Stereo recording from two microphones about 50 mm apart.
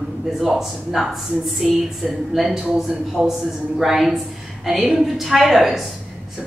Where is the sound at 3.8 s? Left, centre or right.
Centre.